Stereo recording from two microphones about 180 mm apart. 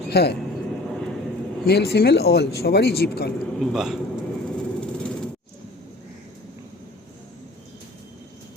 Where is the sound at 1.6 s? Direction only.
65° left (ahead or behind).